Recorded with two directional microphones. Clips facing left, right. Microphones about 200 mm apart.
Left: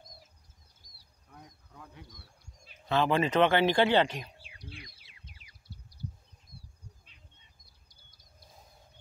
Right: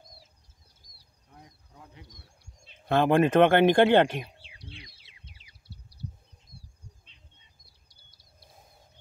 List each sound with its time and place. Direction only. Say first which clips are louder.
2.1 s bird: even; 25° right (ahead or behind)
2.9 s speech: right 5 dB; 55° right (ahead or behind)
4.5 s bird: even; 25° right (ahead or behind)